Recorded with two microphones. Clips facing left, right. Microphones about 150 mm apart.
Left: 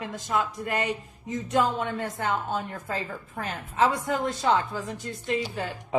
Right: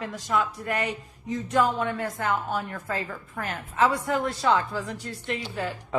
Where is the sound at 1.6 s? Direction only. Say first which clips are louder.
Right 3 dB; 20° left (ahead or behind).